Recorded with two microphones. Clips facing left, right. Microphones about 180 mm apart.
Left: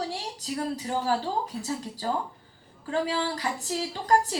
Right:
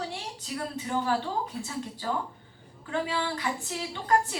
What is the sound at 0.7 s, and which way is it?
A woman's voice, 35° left (ahead or behind).